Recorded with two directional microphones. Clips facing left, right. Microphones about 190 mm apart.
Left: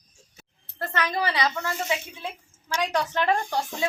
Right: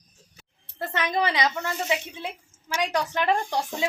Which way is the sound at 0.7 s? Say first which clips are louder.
Right 1 dB; 20° right (ahead or behind).